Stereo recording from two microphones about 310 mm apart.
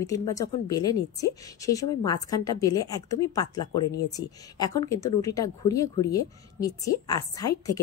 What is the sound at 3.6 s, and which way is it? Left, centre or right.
Speech, left.